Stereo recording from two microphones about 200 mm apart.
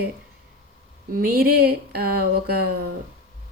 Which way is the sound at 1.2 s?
50° right (ahead or behind).